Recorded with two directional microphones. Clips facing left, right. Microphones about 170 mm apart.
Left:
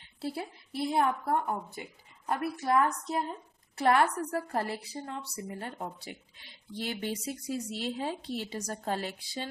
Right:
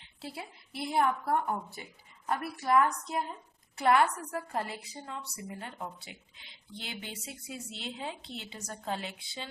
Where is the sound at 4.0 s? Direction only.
40° left (ahead or behind).